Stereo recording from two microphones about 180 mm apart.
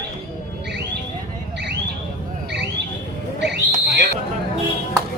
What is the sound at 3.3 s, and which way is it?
Owl, 70° right (ahead or behind).